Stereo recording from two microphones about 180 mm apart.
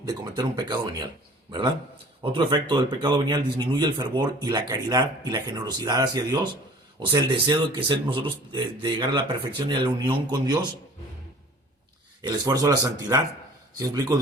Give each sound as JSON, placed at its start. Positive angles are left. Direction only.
{"t": 0.0, "sound": "a man's voice", "side_deg": -20}
{"t": 2.2, "sound": "a man's voice", "side_deg": -25}
{"t": 12.2, "sound": "a man's voice", "side_deg": -20}